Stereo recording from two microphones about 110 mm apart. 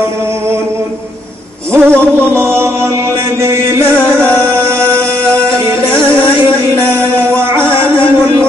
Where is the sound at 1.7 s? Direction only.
20° right (ahead or behind).